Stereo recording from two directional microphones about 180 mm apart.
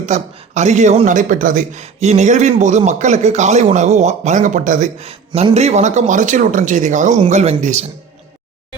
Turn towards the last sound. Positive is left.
turn(degrees=-40)  # may be behind; listen again after turning